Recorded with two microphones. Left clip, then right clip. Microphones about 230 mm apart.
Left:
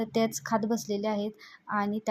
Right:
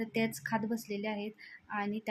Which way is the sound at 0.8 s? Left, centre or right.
Centre.